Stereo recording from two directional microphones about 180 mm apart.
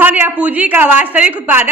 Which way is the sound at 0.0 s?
10° right (ahead or behind).